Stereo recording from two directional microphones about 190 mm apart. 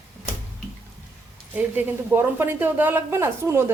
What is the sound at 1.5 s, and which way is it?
A woman's voice, 10° right (ahead or behind).